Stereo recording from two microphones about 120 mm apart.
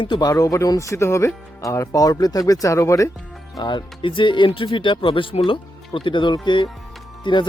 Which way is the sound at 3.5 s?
40° left (ahead or behind).